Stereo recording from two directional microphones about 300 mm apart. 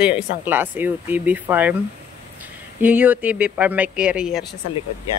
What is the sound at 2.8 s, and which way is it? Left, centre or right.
Speech, centre.